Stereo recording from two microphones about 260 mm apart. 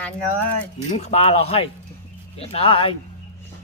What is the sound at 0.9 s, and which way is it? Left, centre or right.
Speech, left.